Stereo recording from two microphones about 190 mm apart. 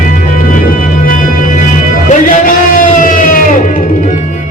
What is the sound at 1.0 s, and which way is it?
Music, 45° left (ahead or behind).